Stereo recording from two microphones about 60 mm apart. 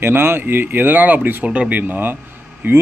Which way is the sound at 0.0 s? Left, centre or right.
Right.